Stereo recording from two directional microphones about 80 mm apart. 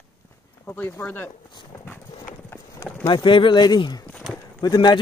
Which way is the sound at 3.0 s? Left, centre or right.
Left.